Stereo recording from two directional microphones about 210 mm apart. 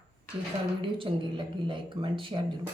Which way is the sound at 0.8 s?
25° right (ahead or behind).